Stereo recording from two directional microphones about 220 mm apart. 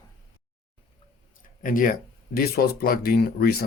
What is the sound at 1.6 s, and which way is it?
Speech, 35° left (ahead or behind).